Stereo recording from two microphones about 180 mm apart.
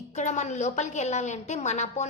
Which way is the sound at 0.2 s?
40° left (ahead or behind).